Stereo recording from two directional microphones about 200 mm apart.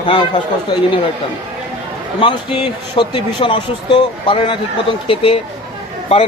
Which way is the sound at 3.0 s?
25° left (ahead or behind).